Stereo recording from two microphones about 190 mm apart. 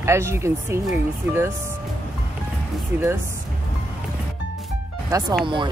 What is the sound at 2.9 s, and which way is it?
Speech, 10° right (ahead or behind).